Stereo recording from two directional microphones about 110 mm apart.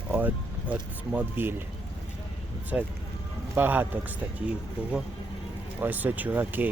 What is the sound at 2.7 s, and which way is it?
Speech, 10° right (ahead or behind).